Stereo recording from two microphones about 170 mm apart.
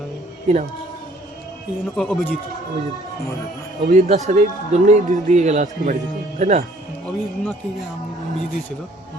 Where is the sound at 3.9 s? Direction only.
50° right (ahead or behind).